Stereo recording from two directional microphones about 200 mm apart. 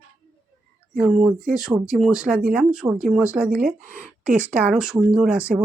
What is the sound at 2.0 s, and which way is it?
Speech, 5° right (ahead or behind).